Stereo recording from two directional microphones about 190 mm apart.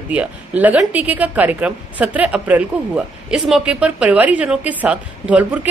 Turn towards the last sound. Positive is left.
turn(degrees=-10)  # may be behind; listen again after turning